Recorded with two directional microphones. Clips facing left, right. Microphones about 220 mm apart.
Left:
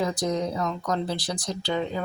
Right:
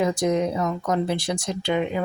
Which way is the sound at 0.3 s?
20° right (ahead or behind).